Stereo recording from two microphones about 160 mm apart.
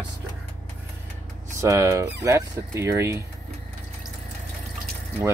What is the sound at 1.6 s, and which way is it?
Speech, 20° right (ahead or behind).